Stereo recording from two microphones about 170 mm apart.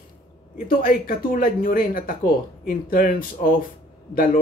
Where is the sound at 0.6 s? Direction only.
55° left (ahead or behind).